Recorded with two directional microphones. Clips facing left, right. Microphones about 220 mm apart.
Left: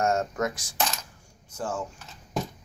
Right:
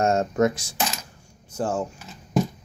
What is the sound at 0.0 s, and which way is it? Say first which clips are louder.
Speech: right 5 dB; 25° right (ahead or behind).